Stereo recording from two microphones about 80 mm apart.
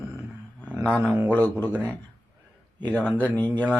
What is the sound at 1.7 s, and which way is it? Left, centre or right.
Speech, right.